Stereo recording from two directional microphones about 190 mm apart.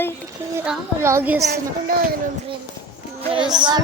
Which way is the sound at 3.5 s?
20° right (ahead or behind).